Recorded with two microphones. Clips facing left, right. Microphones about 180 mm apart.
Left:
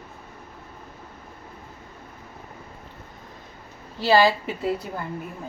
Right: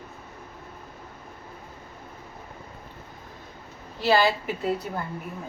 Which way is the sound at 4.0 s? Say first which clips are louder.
Left 3 dB; 30° left (ahead or behind).